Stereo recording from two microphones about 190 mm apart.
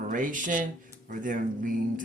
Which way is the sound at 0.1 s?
45° right (ahead or behind).